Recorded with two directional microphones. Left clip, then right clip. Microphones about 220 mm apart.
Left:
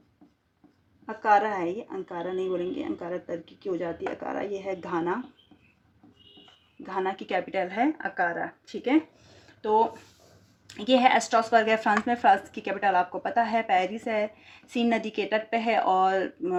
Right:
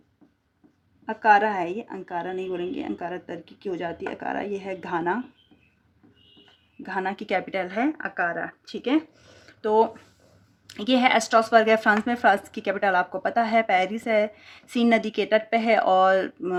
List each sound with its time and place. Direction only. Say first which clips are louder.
1.0 s a woman's voice: right 4 dB; 45° right (ahead or behind)
6.8 s speech: right 2 dB; 45° right (ahead or behind)